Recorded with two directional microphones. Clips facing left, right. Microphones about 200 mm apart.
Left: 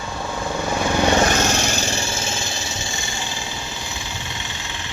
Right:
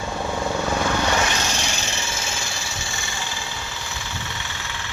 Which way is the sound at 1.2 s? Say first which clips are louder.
Left 6 dB; 45° left (ahead or behind).